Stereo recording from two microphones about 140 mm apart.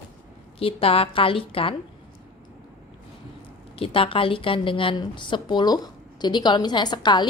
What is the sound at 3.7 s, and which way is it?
A woman's voice, 40° left (ahead or behind).